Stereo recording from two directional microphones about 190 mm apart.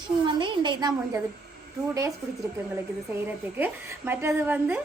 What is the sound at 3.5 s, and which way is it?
Speech, 10° right (ahead or behind).